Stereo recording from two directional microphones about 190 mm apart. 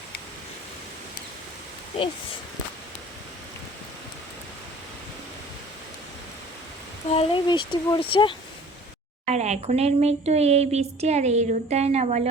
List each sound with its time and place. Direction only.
7.1 s speech: 30° left (ahead or behind)
9.2 s speech: 35° right (ahead or behind)